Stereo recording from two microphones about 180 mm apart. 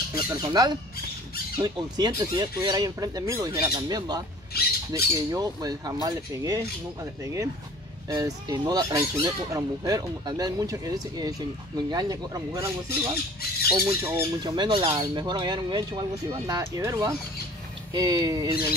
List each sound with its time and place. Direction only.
0.1 s speech: 20° right (ahead or behind)
4.6 s squawk: 60° left (ahead or behind)
4.9 s speech: 20° right (ahead or behind)
8.1 s speech: 20° right (ahead or behind)
13.7 s speech: 15° right (ahead or behind)
14.4 s speech: 25° right (ahead or behind)